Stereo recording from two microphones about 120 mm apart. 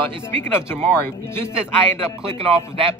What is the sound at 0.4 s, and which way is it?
Speech, 20° left (ahead or behind).